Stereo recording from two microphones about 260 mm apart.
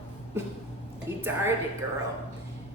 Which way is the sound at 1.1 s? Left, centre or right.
Centre.